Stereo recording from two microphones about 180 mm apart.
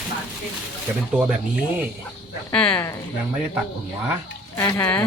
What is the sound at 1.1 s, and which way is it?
Speech, 5° right (ahead or behind).